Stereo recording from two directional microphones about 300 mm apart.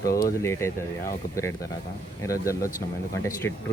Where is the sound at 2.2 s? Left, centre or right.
Centre.